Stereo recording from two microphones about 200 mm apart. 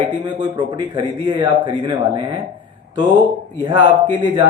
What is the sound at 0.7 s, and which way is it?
A man's voice, 25° right (ahead or behind).